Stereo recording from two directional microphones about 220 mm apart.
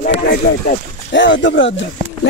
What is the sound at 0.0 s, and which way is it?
A man's voice, 45° left (ahead or behind).